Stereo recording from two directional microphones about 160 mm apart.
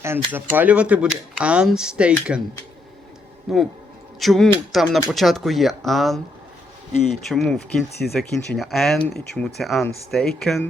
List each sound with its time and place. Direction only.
0.3 s speech: 10° right (ahead or behind)
3.5 s speech: centre (ahead or behind)
7.3 s speech: centre (ahead or behind)